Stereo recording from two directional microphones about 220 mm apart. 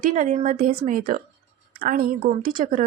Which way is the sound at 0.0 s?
35° right (ahead or behind).